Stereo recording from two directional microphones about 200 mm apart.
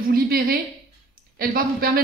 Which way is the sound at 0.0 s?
50° right (ahead or behind).